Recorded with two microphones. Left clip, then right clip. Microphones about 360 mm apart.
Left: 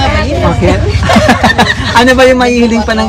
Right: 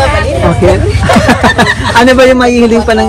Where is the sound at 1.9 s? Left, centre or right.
Left.